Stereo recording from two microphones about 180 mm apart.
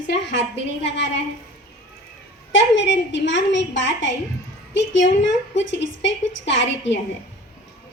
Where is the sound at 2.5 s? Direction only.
85° left.